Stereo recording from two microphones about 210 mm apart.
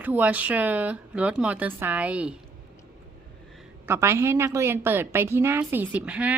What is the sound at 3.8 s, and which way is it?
A woman's voice, 10° right (ahead or behind).